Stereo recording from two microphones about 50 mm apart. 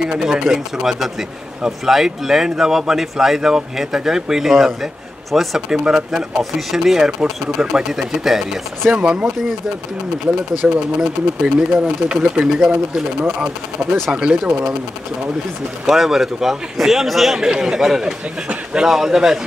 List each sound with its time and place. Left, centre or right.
0.0 s a man's voice: centre
7.1 s a man's voice: centre
8.9 s speech: centre
10.6 s a man's voice: centre
12.4 s a man's voice: centre
14.1 s a man's voice: centre
15.8 s a man's voice: centre